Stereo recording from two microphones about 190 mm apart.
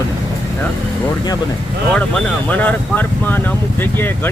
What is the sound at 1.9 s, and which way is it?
Speech, 5° left (ahead or behind).